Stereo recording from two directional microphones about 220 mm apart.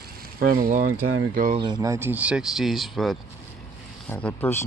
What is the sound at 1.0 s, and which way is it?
Speech, 70° right (ahead or behind).